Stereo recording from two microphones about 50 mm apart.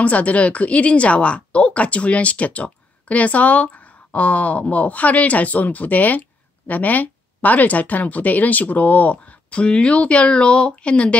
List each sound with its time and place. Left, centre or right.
0.0 s speech: left